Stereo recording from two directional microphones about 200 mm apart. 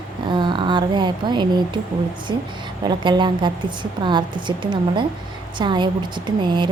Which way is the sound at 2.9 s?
20° right (ahead or behind).